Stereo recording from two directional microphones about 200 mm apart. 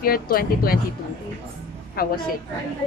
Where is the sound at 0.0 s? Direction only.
45° left (ahead or behind).